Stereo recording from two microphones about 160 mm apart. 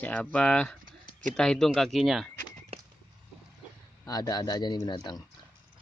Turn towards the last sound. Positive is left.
turn(degrees=25)  # may be behind; listen again after turning